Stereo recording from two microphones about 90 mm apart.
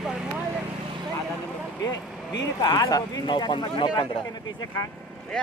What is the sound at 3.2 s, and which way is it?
Speech, 65° left (ahead or behind).